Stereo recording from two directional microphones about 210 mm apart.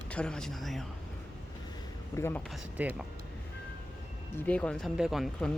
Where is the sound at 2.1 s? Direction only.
10° left (ahead or behind).